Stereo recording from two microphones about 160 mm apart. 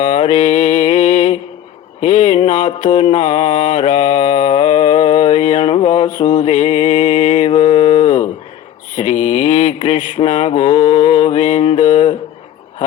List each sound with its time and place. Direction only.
0.1 s mantra: 35° left (ahead or behind)
0.3 s mantra: 50° left (ahead or behind); by 8.0 s 35° left (ahead or behind)
9.0 s a sound: 55° left (ahead or behind)
9.8 s mantra: 40° left (ahead or behind)